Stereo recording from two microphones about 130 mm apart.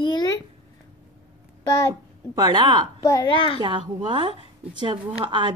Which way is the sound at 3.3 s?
40° left (ahead or behind).